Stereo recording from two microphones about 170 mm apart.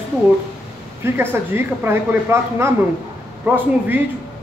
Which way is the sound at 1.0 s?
15° right (ahead or behind).